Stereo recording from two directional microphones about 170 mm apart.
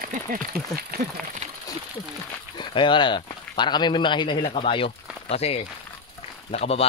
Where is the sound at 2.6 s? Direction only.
30° left (ahead or behind).